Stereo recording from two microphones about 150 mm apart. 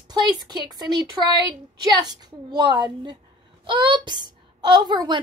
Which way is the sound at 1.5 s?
25° right (ahead or behind).